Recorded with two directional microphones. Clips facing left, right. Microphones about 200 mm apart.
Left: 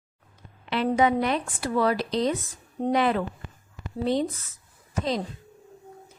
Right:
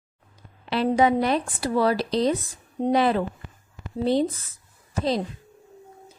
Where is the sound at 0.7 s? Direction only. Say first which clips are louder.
Right 2 dB; 35° right (ahead or behind).